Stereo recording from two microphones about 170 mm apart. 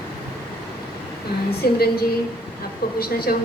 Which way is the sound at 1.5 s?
65° left (ahead or behind).